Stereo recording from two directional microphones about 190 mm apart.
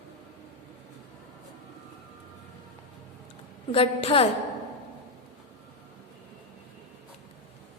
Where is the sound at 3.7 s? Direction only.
30° left (ahead or behind).